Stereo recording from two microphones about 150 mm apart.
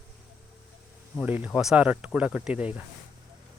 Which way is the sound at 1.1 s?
10° right (ahead or behind).